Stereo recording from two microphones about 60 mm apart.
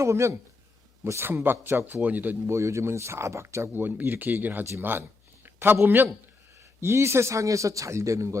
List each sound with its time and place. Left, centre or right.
0.0 s a man's voice: right
2.5 s speech: right
3.7 s a man's voice: right
6.8 s a man's voice: right